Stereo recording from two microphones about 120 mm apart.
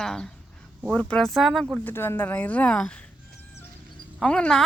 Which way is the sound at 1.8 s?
20° left (ahead or behind).